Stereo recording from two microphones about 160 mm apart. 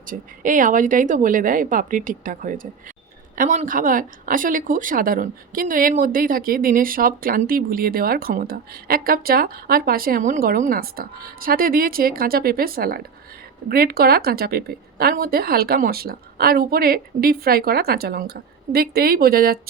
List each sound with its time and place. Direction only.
0.0 s a woman's voice: 55° right (ahead or behind)